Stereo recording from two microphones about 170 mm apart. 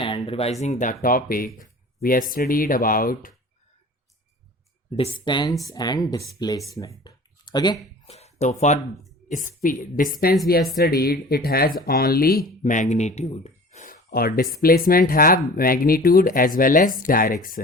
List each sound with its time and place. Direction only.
0.0 s a sound: 30° left (ahead or behind)
0.6 s speech: 45° left (ahead or behind)
4.9 s speech: 30° left (ahead or behind)
6.7 s a sound: 20° left (ahead or behind)
8.1 s a woman's voice: 40° left (ahead or behind); by 12.4 s 60° left (ahead or behind)
12.6 s speech: 50° left (ahead or behind)